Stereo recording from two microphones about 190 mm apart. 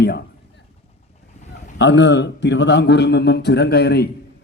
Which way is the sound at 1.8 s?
70° left (ahead or behind).